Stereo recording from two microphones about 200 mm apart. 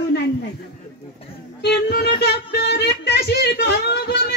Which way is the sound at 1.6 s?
55° left (ahead or behind).